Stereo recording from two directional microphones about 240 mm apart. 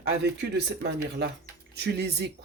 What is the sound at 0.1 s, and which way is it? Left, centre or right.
Speech, right.